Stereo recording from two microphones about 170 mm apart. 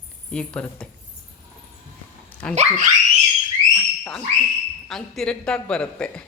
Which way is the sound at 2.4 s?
5° left (ahead or behind).